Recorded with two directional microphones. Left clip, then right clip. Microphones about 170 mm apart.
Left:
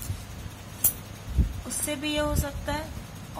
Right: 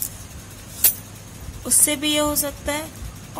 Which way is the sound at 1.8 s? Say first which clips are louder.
Right 6 dB; 35° right (ahead or behind).